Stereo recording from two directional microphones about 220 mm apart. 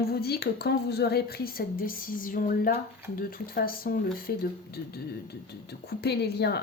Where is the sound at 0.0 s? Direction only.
45° left (ahead or behind).